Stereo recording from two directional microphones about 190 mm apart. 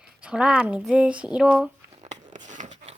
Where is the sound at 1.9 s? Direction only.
35° right (ahead or behind).